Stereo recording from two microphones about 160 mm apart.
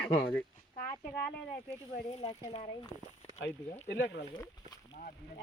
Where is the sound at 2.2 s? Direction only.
40° left (ahead or behind).